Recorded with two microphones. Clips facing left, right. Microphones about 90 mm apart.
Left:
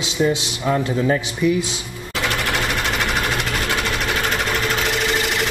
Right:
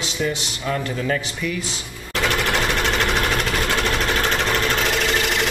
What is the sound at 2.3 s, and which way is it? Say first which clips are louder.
Sewing machine: right 1 dB; 5° left (ahead or behind).